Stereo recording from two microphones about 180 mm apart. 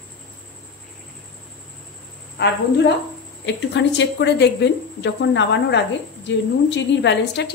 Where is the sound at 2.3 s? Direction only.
70° left (ahead or behind).